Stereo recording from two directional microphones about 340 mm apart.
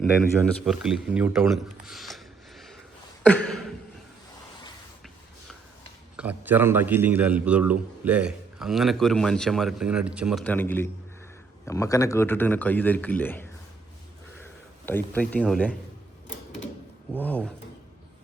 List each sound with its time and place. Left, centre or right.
0.6 s speech: centre
3.2 s a sound: centre
6.1 s a man's voice: centre
14.8 s a man's voice: centre
17.2 s a man's voice: centre